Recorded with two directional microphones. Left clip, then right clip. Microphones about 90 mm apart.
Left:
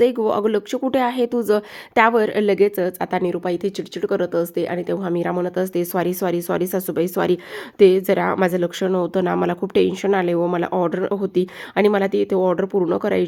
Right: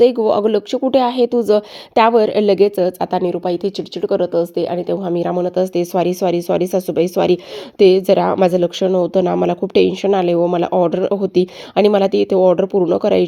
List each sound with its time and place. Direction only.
0.3 s speech: 10° right (ahead or behind)
11.9 s speech: 25° right (ahead or behind)